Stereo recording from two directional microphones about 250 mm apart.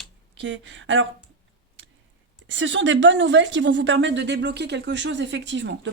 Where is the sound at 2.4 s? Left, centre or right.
Right.